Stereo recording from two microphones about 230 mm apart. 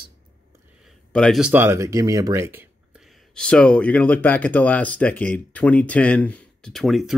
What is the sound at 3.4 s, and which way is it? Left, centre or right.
Speech, centre.